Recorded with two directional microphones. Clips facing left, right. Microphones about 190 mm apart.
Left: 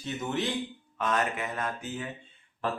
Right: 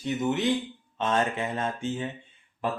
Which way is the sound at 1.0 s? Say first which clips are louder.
Right 3 dB; 25° right (ahead or behind).